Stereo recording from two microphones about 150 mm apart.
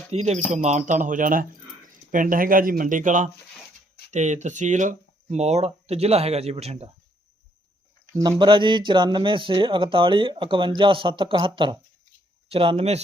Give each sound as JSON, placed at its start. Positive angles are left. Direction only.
{"t": 0.1, "sound": "speech", "side_deg": -45}
{"t": 8.1, "sound": "speech", "side_deg": -20}
{"t": 8.4, "sound": "speech", "side_deg": -35}